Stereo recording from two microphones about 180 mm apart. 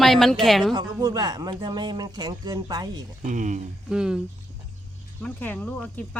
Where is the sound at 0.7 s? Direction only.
20° right (ahead or behind).